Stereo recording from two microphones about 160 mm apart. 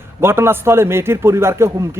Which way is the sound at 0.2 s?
15° right (ahead or behind).